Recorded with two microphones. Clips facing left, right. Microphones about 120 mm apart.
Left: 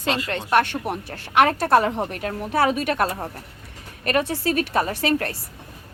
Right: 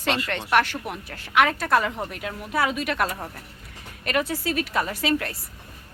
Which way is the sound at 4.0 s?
40° left (ahead or behind).